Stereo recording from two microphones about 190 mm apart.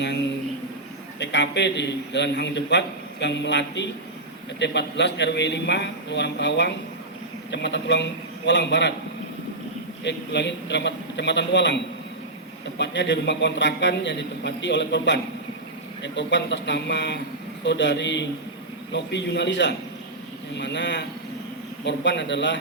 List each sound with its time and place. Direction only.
1.2 s a man's voice: 65° left (ahead or behind)
10.0 s a man's voice: 65° left (ahead or behind)